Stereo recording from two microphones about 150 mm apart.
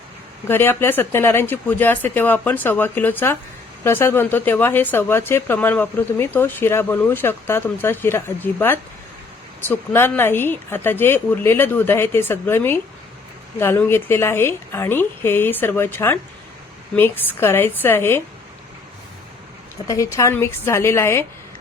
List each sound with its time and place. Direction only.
0.4 s speech: 15° left (ahead or behind)
19.9 s speech: 20° left (ahead or behind)